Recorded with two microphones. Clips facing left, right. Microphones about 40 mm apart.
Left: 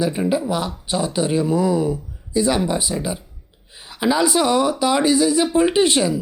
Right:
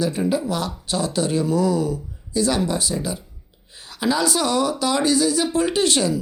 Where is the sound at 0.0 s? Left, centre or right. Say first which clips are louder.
Left 2 dB; centre.